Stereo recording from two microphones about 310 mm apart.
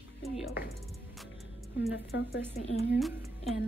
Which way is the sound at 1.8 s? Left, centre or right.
Centre.